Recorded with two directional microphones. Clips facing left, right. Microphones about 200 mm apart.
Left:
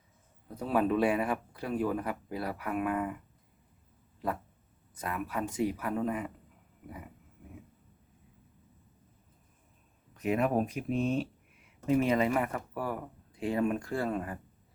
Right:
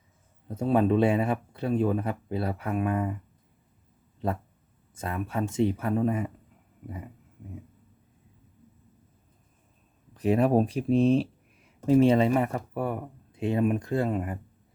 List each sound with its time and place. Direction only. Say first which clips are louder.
0.5 s speech: right 5 dB; 25° right (ahead or behind)
4.9 s speech: right 4 dB; 25° right (ahead or behind)
10.2 s speech: right 6 dB; 35° right (ahead or behind)